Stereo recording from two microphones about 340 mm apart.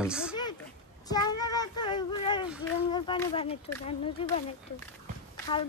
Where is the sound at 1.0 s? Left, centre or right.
Centre.